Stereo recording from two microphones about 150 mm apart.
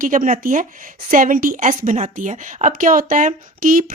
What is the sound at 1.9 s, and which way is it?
A woman's voice, 50° right (ahead or behind).